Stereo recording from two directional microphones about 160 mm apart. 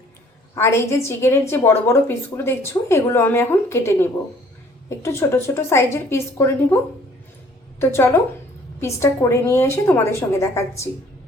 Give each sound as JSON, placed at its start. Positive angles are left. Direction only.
{"t": 0.5, "sound": "a woman's voice", "side_deg": 15}
{"t": 7.8, "sound": "a woman's voice", "side_deg": 15}